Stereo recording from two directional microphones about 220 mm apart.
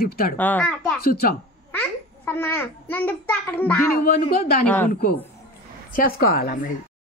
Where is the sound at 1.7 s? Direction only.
10° left (ahead or behind).